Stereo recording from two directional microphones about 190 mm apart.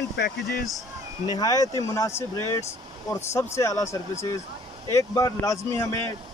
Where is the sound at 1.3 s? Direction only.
20° left (ahead or behind).